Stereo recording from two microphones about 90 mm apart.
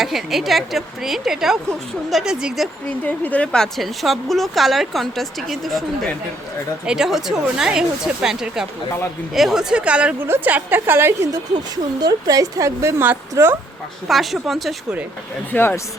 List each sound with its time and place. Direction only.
0.0 s a woman's voice: 5° right (ahead or behind)
3.0 s a woman's voice: 15° left (ahead or behind); by 10.2 s 10° right (ahead or behind)
10.2 s a woman's voice: 25° right (ahead or behind)
11.3 s a woman's voice: 50° right (ahead or behind); by 13.6 s 25° right (ahead or behind)
14.1 s a woman's voice: centre (ahead or behind)
15.5 s speech: 25° left (ahead or behind)